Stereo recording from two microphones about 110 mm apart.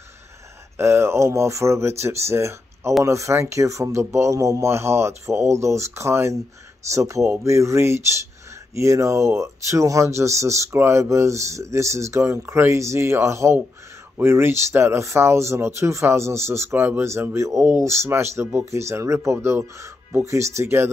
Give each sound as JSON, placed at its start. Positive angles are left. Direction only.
{"t": 0.7, "sound": "speech", "side_deg": -25}